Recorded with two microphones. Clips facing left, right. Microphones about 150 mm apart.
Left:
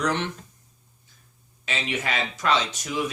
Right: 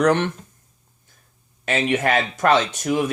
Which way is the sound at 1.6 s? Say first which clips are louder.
Right 9 dB; 55° right (ahead or behind).